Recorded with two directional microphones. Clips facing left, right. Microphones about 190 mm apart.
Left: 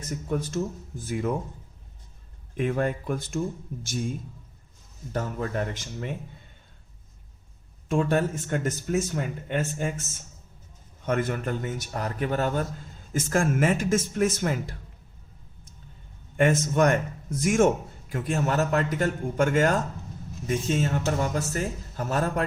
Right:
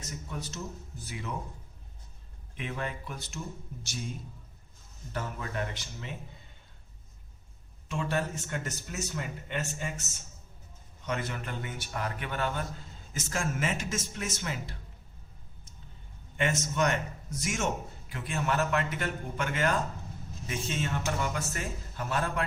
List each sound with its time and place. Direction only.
0.0 s a man's voice: 55° left (ahead or behind)
2.6 s a man's voice: 50° left (ahead or behind)
5.1 s a man's voice: 40° left (ahead or behind)
7.9 s a man's voice: 50° left (ahead or behind)
13.1 s a man's voice: 50° left (ahead or behind)
16.4 s a man's voice: 50° left (ahead or behind)